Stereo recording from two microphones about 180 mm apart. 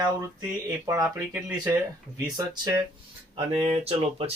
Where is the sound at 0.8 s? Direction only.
20° right (ahead or behind).